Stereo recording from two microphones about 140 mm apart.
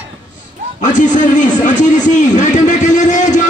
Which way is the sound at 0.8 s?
60° left (ahead or behind).